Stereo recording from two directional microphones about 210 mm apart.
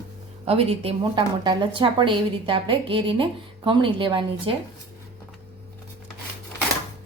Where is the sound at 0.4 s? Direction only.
30° right (ahead or behind).